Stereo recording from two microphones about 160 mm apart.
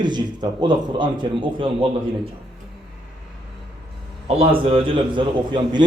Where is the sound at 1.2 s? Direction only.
30° right (ahead or behind).